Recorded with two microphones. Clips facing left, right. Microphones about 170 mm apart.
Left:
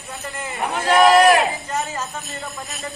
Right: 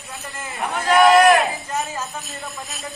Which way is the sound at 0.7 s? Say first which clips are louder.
Even; 20° left (ahead or behind).